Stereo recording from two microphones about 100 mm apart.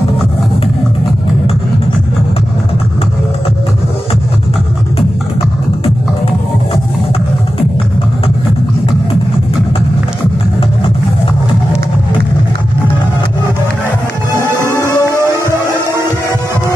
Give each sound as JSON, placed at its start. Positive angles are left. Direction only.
{"t": 14.8, "sound": "music", "side_deg": 35}